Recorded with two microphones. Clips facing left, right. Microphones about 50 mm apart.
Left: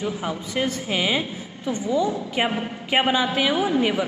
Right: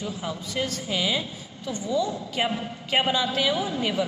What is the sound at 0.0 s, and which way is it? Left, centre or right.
A woman's voice, left.